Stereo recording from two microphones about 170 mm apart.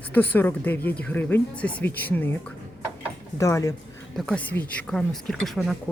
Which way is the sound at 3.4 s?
20° left (ahead or behind).